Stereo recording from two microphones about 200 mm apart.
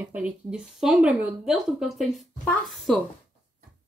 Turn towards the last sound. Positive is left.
turn(degrees=0)  # may be behind; listen again after turning